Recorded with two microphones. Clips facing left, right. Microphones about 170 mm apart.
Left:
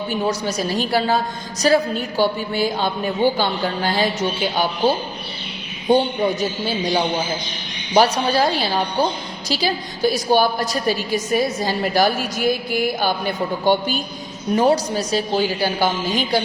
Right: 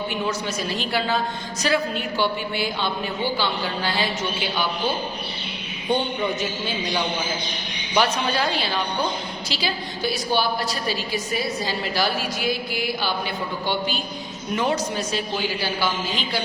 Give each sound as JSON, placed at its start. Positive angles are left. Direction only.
{"t": 0.1, "sound": "a woman's voice", "side_deg": 40}
{"t": 6.4, "sound": "a woman's voice", "side_deg": 35}